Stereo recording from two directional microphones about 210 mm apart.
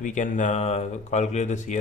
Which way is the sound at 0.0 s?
35° left (ahead or behind).